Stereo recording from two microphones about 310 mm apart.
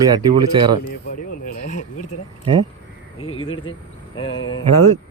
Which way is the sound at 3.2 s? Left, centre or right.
Centre.